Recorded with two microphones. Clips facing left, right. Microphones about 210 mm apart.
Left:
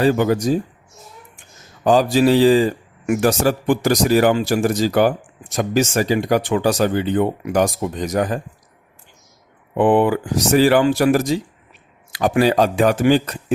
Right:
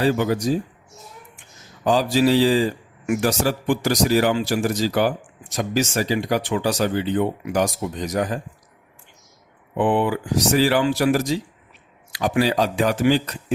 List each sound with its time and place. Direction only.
0.0 s speech: 50° left (ahead or behind)
1.8 s speech: 50° left (ahead or behind)
9.7 s speech: 50° left (ahead or behind)